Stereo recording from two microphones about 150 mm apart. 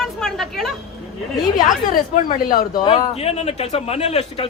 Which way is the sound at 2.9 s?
45° left (ahead or behind).